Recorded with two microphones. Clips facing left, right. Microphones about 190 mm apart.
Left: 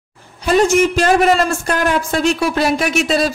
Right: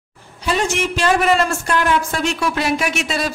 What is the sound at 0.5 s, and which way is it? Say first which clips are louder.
A man's voice: left 7 dB; 45° left (ahead or behind).